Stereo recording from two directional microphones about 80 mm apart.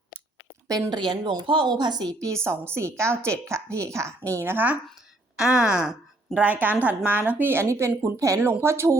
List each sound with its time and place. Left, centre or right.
0.7 s a woman's voice: right
2.4 s a woman's voice: right
4.5 s a woman's voice: right
5.5 s speech: centre
6.4 s a woman's voice: right